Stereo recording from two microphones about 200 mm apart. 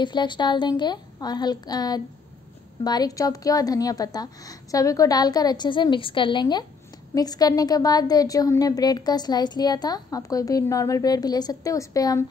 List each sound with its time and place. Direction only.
0.0 s a woman's voice: 25° left (ahead or behind)